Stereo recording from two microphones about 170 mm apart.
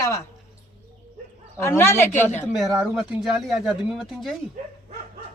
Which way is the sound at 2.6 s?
5° right (ahead or behind).